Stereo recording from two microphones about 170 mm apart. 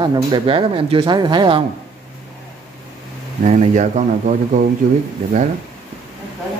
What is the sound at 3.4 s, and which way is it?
Speech, 45° right (ahead or behind).